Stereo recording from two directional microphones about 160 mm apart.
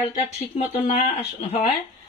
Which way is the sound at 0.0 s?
45° left (ahead or behind).